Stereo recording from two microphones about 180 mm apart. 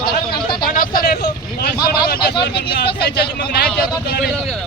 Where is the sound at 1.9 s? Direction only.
55° left (ahead or behind).